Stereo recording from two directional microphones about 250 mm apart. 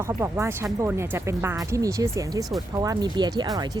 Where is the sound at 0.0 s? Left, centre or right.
Centre.